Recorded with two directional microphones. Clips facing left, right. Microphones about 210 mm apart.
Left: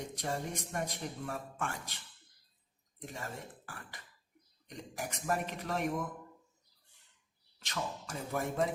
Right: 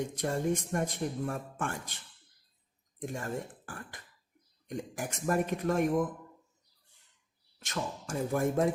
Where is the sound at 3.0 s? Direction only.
50° right (ahead or behind).